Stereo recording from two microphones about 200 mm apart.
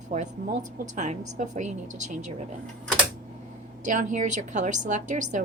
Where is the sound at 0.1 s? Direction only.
35° right (ahead or behind).